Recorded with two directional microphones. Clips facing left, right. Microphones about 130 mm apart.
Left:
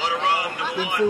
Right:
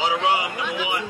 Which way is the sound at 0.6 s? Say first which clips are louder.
Left 1 dB; 40° left (ahead or behind).